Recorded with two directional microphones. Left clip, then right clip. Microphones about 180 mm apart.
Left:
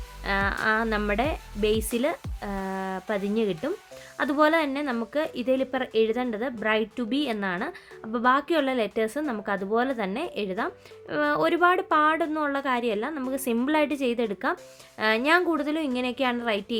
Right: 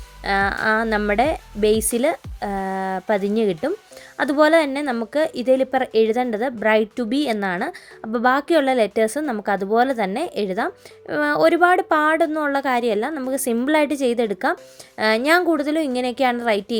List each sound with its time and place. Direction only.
0.2 s a woman's voice: 25° right (ahead or behind)